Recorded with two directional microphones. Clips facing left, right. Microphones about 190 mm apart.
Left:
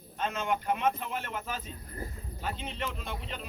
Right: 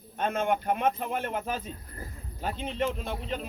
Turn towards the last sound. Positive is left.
turn(degrees=-45)  # may be behind; listen again after turning